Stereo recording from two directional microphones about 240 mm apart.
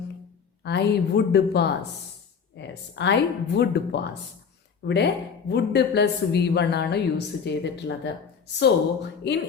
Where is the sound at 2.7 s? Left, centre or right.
Left.